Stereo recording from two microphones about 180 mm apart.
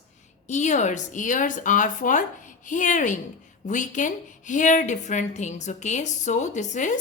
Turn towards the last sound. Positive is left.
turn(degrees=45)  # may be behind; listen again after turning